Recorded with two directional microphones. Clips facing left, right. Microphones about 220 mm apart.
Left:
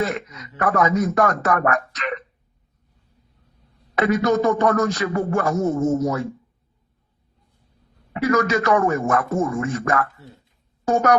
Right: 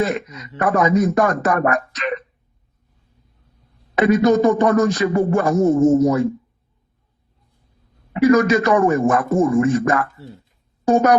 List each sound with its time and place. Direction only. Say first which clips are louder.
0.6 s a man's voice: right 3 dB; 15° right (ahead or behind)
3.9 s a man's voice: right 4 dB; 15° right (ahead or behind)
8.3 s a man's voice: right 4 dB; 15° right (ahead or behind)